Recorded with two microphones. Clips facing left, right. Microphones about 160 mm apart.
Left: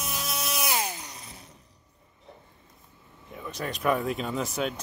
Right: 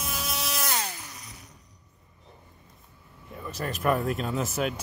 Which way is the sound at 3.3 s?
Centre (ahead or behind).